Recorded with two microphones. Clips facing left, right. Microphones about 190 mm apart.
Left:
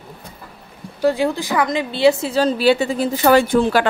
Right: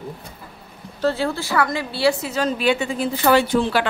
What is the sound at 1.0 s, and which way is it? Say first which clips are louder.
A woman's voice: left 4 dB; 15° left (ahead or behind).